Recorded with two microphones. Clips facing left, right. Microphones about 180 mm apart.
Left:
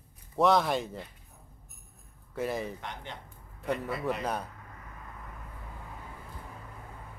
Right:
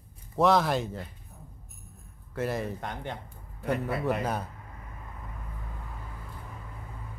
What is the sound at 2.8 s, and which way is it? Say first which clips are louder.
Speech: right 5 dB; 50° right (ahead or behind).